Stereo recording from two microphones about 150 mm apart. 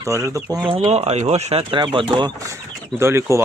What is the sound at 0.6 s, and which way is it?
Speech, 40° right (ahead or behind).